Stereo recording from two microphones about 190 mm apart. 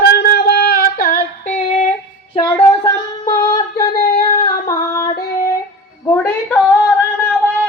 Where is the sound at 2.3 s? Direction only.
25° left (ahead or behind).